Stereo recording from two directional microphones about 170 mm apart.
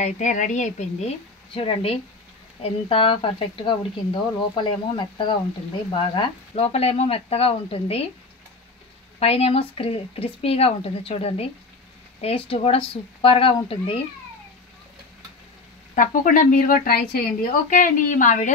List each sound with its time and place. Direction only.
0.0 s a woman's voice: 45° left (ahead or behind)
9.2 s a woman's voice: 35° left (ahead or behind)
15.9 s speech: 50° left (ahead or behind)